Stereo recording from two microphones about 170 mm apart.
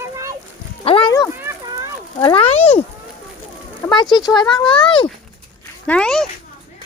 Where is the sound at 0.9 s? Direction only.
30° left (ahead or behind).